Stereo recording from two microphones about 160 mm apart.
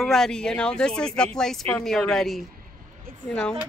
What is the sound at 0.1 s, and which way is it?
Speech, 5° left (ahead or behind).